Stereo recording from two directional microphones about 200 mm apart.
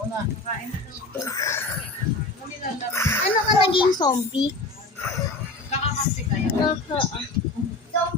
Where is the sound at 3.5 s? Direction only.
25° left (ahead or behind).